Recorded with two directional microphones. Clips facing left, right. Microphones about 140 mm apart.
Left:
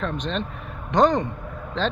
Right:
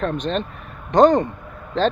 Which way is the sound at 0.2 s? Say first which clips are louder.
Right 4 dB; 45° right (ahead or behind).